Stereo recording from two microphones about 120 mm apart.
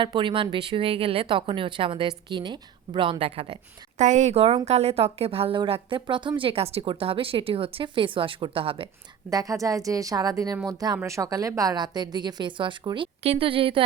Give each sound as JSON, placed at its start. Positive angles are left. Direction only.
{"t": 0.0, "sound": "a woman's voice", "side_deg": -45}
{"t": 3.9, "sound": "a woman's voice", "side_deg": -85}
{"t": 6.4, "sound": "a woman's voice", "side_deg": -55}
{"t": 9.3, "sound": "a woman's voice", "side_deg": -30}
{"t": 13.2, "sound": "a woman's voice", "side_deg": -55}